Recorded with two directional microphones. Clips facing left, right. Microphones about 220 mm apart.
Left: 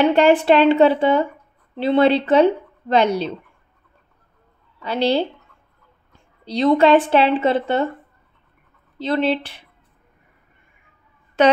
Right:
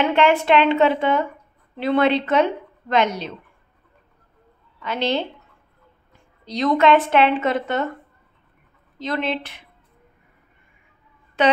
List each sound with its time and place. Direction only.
0.0 s speech: 35° left (ahead or behind)
4.8 s speech: 35° left (ahead or behind)
6.4 s speech: 30° left (ahead or behind)
8.9 s speech: 30° left (ahead or behind)
11.4 s a woman's voice: 45° left (ahead or behind)